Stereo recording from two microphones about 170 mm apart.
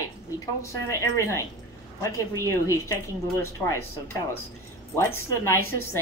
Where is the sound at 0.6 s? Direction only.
15° left (ahead or behind).